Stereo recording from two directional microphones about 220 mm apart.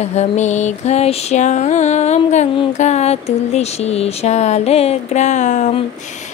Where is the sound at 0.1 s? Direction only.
30° left (ahead or behind).